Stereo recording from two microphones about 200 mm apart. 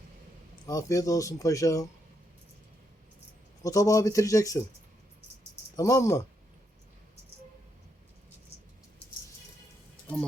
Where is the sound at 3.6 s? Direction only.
15° left (ahead or behind).